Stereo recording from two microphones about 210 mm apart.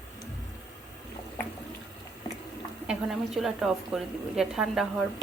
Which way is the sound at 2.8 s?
Centre (ahead or behind).